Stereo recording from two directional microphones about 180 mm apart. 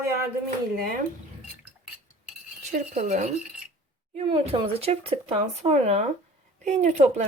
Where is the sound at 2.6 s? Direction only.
40° right (ahead or behind).